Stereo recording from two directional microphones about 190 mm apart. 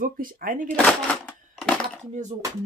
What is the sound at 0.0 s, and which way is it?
Speech, 45° right (ahead or behind).